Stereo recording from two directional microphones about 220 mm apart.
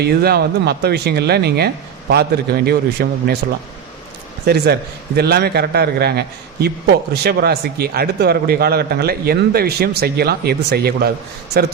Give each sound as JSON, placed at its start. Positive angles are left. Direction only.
{"t": 0.0, "sound": "a man's voice", "side_deg": -45}
{"t": 4.4, "sound": "a man's voice", "side_deg": -50}